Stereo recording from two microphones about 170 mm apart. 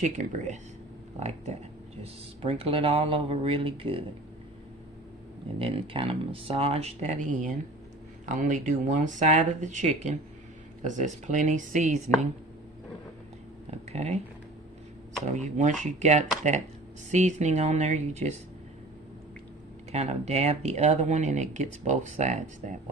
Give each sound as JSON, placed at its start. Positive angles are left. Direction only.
{"t": 0.0, "sound": "speech", "side_deg": -45}
{"t": 5.5, "sound": "speech", "side_deg": -35}
{"t": 13.7, "sound": "a sound", "side_deg": -40}
{"t": 15.4, "sound": "speech", "side_deg": -45}
{"t": 19.9, "sound": "speech", "side_deg": -40}